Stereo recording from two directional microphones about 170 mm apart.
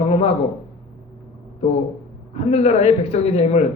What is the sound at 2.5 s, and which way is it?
Speech, 40° left (ahead or behind).